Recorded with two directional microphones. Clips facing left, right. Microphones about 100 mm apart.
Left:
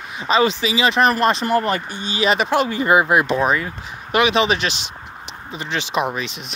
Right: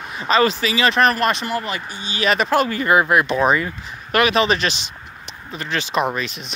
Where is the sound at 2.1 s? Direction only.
25° left (ahead or behind).